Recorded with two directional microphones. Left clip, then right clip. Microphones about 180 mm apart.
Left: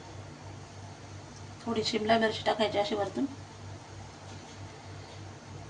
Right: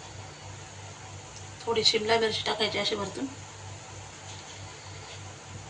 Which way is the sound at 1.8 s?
55° left (ahead or behind).